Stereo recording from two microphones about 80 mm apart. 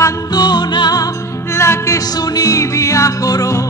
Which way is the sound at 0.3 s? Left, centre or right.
Left.